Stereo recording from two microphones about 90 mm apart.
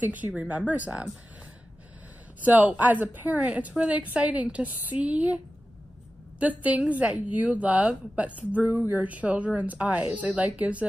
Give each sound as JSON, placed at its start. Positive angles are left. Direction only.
{"t": 0.0, "sound": "a woman's voice", "side_deg": -20}
{"t": 2.4, "sound": "a woman's voice", "side_deg": -20}
{"t": 6.4, "sound": "a woman's voice", "side_deg": -15}